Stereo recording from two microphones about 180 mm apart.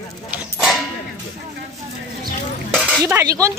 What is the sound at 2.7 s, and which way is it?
Cutlery, centre (ahead or behind).